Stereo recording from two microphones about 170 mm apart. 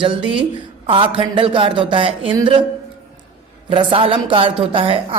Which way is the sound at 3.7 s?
30° right (ahead or behind).